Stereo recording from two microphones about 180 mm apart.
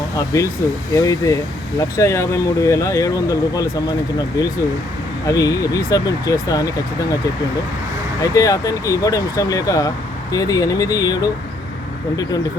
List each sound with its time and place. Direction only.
0.2 s speech: 15° left (ahead or behind)
8.2 s speech: 20° left (ahead or behind)